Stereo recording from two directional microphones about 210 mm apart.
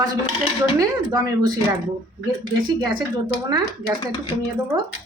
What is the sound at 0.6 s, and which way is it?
Speech, 15° right (ahead or behind).